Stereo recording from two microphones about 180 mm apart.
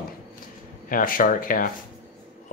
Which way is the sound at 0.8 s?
50° left (ahead or behind).